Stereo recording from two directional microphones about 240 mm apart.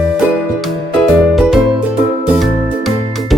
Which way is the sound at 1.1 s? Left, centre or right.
Centre.